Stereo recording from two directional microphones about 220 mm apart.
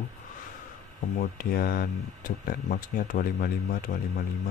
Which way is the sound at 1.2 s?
40° left (ahead or behind).